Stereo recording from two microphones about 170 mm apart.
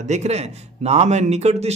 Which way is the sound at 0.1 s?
40° right (ahead or behind).